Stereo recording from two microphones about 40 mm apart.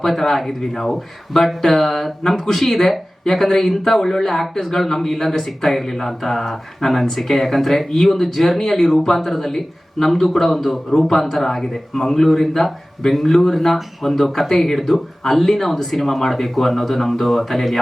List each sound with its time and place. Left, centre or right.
0.0 s speech: centre